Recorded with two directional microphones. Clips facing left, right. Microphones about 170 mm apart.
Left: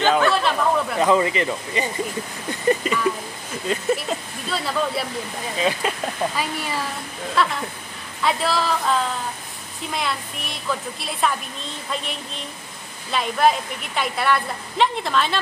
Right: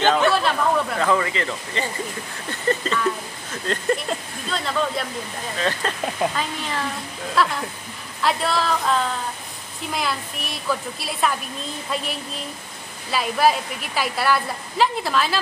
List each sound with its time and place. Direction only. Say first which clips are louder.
0.3 s speech: even; centre (ahead or behind)
0.9 s speech: left 3 dB; 20° left (ahead or behind)
7.3 s a woman's voice: right 1 dB; centre (ahead or behind)
13.1 s a woman's voice: even; 5° right (ahead or behind)